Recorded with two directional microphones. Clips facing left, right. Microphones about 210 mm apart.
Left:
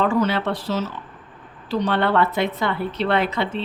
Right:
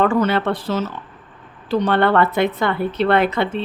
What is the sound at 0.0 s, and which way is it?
A woman's voice, 55° right (ahead or behind).